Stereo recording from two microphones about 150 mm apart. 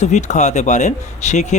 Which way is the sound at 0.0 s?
50° left (ahead or behind).